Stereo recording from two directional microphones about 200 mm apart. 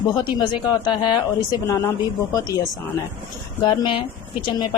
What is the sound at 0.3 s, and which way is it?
Speech, 20° left (ahead or behind).